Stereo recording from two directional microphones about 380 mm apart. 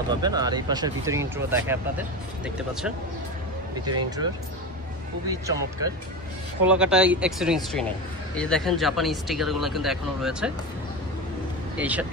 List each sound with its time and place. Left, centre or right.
0.1 s speech: centre
5.3 s speech: centre
11.8 s speech: centre